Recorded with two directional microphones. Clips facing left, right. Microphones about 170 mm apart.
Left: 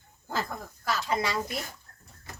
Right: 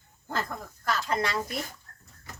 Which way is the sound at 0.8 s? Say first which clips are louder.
Even; 10° left (ahead or behind).